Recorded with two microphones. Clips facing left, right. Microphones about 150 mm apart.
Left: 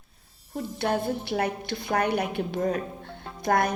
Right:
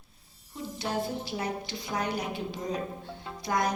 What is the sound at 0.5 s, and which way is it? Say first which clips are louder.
Music: left 5 dB; 55° left (ahead or behind).